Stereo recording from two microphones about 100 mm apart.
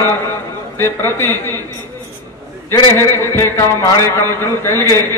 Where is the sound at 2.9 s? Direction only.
25° left (ahead or behind).